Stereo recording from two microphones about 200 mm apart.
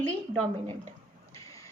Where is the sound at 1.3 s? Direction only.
15° left (ahead or behind).